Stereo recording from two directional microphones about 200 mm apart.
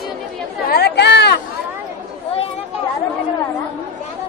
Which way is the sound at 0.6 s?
55° left (ahead or behind).